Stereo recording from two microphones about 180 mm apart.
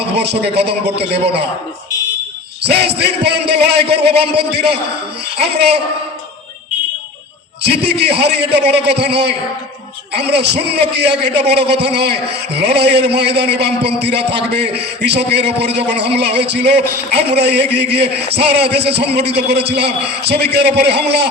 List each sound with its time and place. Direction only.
0.6 s a man's voice: 65° right (ahead or behind)
2.6 s a man's voice: 65° right (ahead or behind)
7.6 s a man's voice: 65° right (ahead or behind)